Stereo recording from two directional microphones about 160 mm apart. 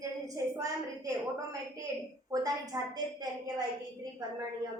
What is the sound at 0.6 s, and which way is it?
Speech, 20° right (ahead or behind).